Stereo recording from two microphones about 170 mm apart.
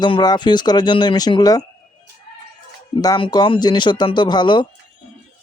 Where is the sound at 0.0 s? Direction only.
25° left (ahead or behind).